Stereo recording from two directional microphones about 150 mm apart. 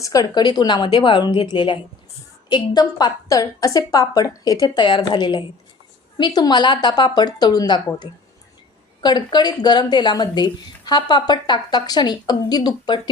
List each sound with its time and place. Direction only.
0.0 s a woman's voice: 25° left (ahead or behind)
9.0 s a woman's voice: 30° left (ahead or behind)